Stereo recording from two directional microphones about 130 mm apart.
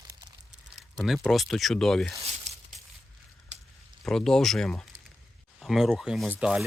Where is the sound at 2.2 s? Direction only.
55° right (ahead or behind).